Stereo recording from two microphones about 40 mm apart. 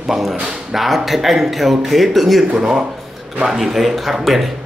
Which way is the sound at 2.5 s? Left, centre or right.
Centre.